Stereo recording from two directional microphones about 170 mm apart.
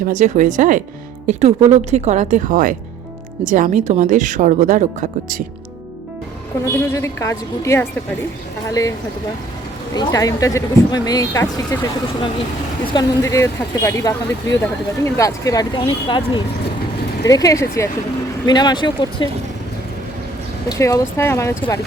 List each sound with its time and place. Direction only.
0.1 s a woman's voice: 45° right (ahead or behind)
6.9 s a woman's voice: 20° left (ahead or behind)
12.9 s speech: 20° left (ahead or behind)
20.7 s a woman's voice: 20° left (ahead or behind)